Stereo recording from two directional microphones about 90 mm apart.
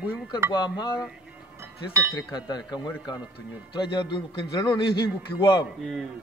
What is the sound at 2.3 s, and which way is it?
Speech, 50° left (ahead or behind).